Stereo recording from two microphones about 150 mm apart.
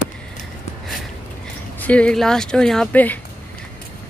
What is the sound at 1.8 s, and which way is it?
Speech, 10° left (ahead or behind).